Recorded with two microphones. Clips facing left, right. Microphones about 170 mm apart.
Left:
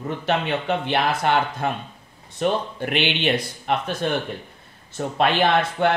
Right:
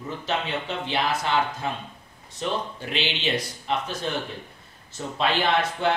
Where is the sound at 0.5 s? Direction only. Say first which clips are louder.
Left 6 dB; 60° left (ahead or behind).